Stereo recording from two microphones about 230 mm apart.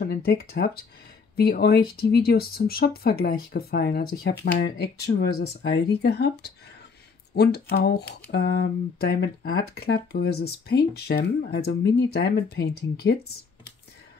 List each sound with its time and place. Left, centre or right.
0.0 s speech: left